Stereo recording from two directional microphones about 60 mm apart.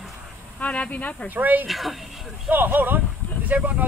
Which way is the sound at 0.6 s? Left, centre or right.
Left.